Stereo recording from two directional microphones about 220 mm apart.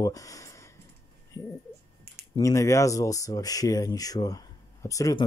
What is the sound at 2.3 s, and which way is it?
Speech, 15° left (ahead or behind).